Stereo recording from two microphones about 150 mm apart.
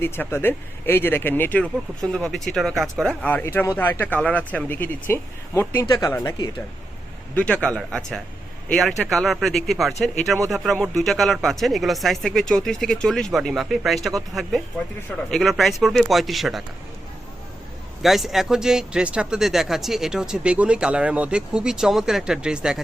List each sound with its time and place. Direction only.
0.0 s speech: 15° left (ahead or behind)
7.3 s speech: 5° left (ahead or behind)
15.3 s speech: centre (ahead or behind)
18.0 s speech: centre (ahead or behind)